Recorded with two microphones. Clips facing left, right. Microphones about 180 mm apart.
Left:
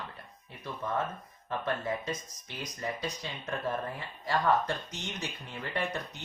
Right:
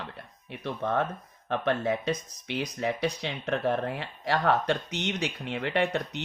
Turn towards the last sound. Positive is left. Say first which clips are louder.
# right 7 dB
turn(degrees=-70)  # may be behind; listen again after turning